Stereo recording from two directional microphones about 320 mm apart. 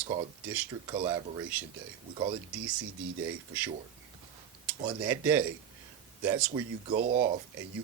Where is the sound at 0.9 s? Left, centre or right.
Centre.